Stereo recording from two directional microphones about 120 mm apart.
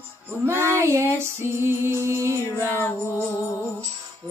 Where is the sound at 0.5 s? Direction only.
20° right (ahead or behind).